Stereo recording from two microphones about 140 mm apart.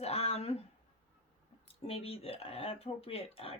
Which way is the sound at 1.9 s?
45° left (ahead or behind).